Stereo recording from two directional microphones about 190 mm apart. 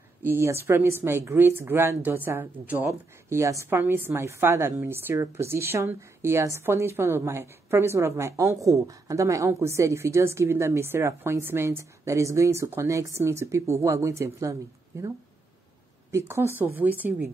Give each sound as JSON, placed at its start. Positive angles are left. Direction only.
{"t": 0.2, "sound": "speech", "side_deg": -10}